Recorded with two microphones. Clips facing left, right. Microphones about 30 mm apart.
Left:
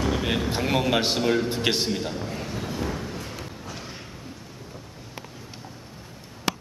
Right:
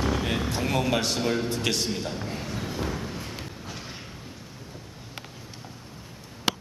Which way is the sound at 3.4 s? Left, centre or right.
Centre.